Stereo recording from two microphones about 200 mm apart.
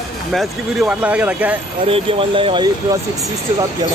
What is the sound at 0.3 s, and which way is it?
Speech, centre (ahead or behind).